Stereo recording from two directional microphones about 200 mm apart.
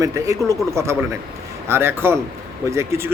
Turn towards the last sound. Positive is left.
turn(degrees=-15)  # may be behind; listen again after turning